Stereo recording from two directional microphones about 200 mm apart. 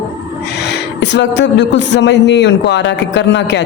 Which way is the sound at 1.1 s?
60° left (ahead or behind).